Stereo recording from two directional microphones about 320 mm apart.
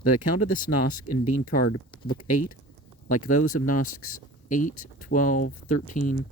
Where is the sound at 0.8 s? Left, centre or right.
Left.